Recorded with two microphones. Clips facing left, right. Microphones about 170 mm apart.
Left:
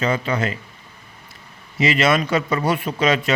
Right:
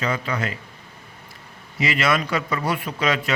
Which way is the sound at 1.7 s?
25° left (ahead or behind).